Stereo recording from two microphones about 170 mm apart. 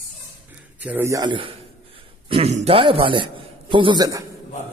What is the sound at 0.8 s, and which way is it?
A man's voice, 10° right (ahead or behind).